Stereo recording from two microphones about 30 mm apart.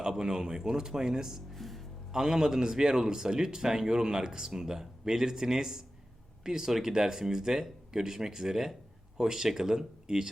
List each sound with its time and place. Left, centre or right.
0.1 s a man's voice: centre
1.5 s music: centre
2.1 s a man's voice: centre